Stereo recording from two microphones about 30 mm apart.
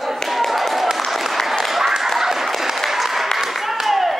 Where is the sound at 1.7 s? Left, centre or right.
Centre.